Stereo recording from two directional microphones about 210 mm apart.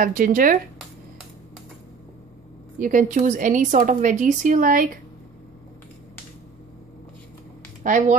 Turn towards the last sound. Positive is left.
turn(degrees=-40)  # may be behind; listen again after turning